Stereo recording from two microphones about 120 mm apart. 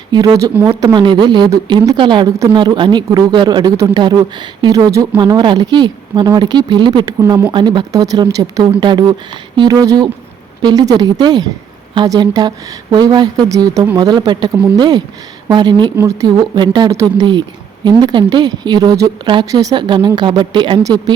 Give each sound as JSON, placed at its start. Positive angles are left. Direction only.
{"t": 0.1, "sound": "speech", "side_deg": -35}
{"t": 5.1, "sound": "speech", "side_deg": -40}
{"t": 16.9, "sound": "speech", "side_deg": -25}
{"t": 17.8, "sound": "speech", "side_deg": -40}